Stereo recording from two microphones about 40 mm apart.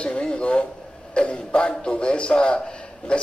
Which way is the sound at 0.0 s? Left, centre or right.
Left.